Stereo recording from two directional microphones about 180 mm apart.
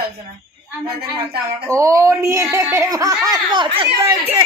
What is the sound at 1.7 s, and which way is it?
Speech, 15° right (ahead or behind).